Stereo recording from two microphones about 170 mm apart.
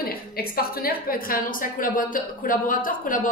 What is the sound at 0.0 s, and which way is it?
A woman's voice, 60° left (ahead or behind).